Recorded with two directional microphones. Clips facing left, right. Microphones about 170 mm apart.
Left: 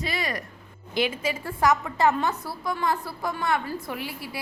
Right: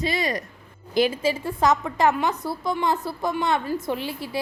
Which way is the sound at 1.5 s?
20° right (ahead or behind).